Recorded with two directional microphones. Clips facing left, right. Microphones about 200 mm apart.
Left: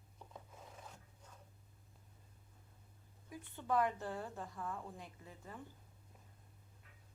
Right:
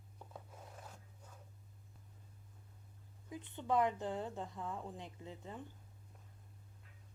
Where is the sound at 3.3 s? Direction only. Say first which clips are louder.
Right 1 dB; 20° right (ahead or behind).